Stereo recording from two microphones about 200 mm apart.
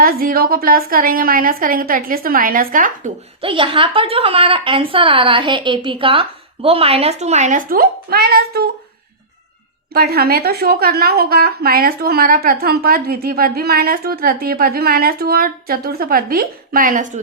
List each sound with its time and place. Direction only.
0.0 s a woman's voice: 45° right (ahead or behind)
3.4 s a woman's voice: 25° right (ahead or behind); by 8.7 s 50° right (ahead or behind)
9.9 s a woman's voice: 50° right (ahead or behind)